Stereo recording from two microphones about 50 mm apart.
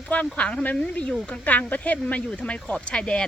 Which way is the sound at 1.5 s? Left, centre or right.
Left.